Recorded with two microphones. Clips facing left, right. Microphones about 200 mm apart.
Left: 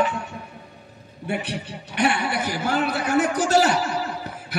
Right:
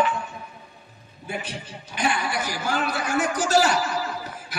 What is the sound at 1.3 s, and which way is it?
Music, 65° left (ahead or behind).